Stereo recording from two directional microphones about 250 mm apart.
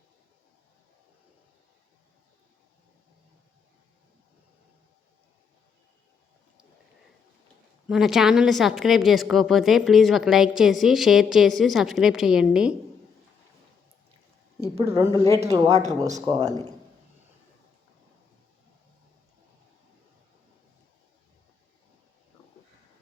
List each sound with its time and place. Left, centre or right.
7.9 s a woman's voice: centre
14.8 s speech: centre
15.7 s speech: right
16.0 s speech: centre